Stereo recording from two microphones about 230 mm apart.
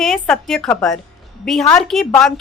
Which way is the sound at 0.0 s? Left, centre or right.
Centre.